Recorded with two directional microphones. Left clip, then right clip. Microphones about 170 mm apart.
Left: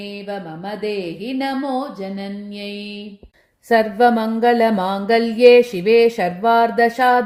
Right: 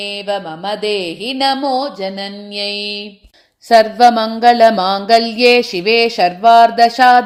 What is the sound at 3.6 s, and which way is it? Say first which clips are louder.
Mantra: right 6 dB; 10° right (ahead or behind).